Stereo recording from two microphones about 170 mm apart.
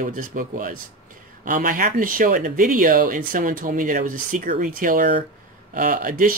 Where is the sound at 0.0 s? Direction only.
55° right (ahead or behind).